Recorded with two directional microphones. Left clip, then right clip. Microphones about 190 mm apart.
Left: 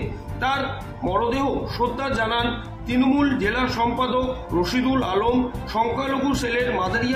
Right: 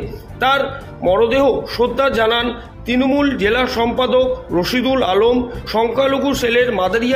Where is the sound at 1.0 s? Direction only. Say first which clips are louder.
Right 9 dB; 50° right (ahead or behind).